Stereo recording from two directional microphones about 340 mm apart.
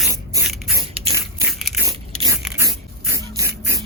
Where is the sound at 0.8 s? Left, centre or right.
Centre.